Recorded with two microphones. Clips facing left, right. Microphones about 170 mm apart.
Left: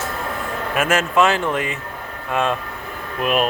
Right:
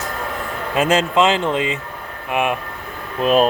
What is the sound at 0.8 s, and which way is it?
Speech, 20° right (ahead or behind).